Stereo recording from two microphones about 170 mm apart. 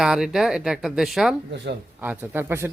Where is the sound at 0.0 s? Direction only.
5° right (ahead or behind).